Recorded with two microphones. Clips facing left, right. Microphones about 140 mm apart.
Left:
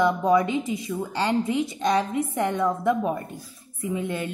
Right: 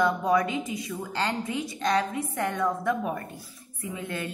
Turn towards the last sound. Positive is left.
turn(degrees=20)  # may be behind; listen again after turning